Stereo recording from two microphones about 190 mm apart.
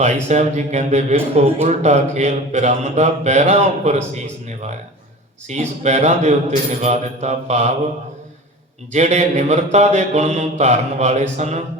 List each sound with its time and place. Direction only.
0.0 s speech: 35° right (ahead or behind)
8.9 s speech: 35° right (ahead or behind)